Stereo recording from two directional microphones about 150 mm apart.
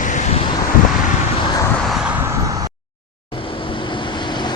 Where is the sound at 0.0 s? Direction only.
55° left (ahead or behind).